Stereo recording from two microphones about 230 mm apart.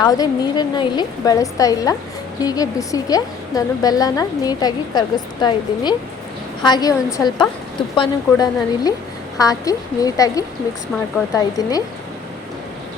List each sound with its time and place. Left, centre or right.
0.0 s a woman's voice: centre